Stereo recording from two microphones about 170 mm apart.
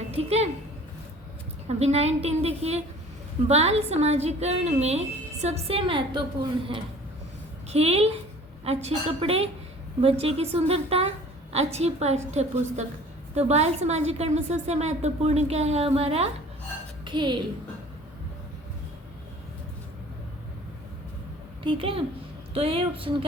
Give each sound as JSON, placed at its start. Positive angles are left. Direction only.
{"t": 0.1, "sound": "a woman's voice", "side_deg": -40}
{"t": 1.6, "sound": "a woman's voice", "side_deg": -40}
{"t": 17.1, "sound": "a woman's voice", "side_deg": -25}
{"t": 21.6, "sound": "a woman's voice", "side_deg": -30}